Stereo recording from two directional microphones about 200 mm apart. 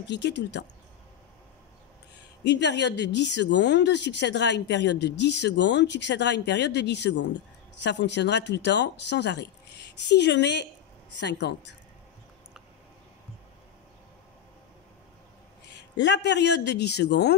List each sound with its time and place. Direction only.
0.0 s a woman's voice: 60° left (ahead or behind)
2.4 s a woman's voice: 60° left (ahead or behind)
15.7 s a woman's voice: 60° left (ahead or behind)